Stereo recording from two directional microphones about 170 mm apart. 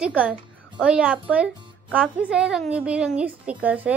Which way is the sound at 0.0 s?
5° right (ahead or behind).